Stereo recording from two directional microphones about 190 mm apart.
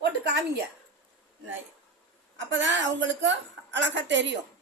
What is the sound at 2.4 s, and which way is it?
A woman's voice, 75° right (ahead or behind).